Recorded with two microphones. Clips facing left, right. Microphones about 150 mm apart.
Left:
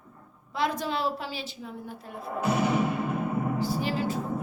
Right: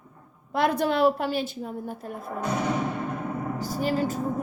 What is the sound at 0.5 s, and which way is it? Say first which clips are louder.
A woman's voice: right 5 dB; 60° right (ahead or behind).